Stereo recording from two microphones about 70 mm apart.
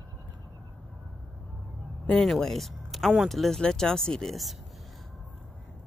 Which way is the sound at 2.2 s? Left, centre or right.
Centre.